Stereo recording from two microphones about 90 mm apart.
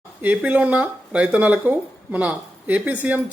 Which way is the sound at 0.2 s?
15° right (ahead or behind).